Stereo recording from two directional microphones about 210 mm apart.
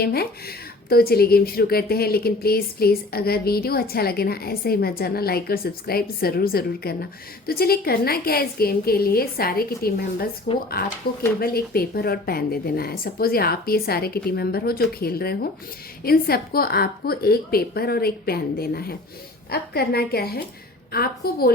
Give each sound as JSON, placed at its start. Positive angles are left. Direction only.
{"t": 0.0, "sound": "speech", "side_deg": 50}